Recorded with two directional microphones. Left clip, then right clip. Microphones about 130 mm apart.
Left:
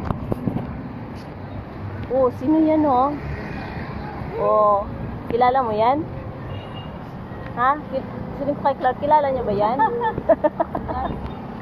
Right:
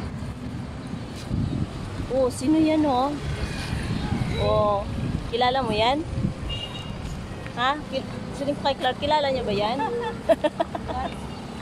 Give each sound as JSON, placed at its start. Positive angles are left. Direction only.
{"t": 2.2, "sound": "speech", "side_deg": -50}
{"t": 4.5, "sound": "speech", "side_deg": -35}
{"t": 7.5, "sound": "speech", "side_deg": -45}
{"t": 9.8, "sound": "speech", "side_deg": -5}
{"t": 10.2, "sound": "chicken", "side_deg": -40}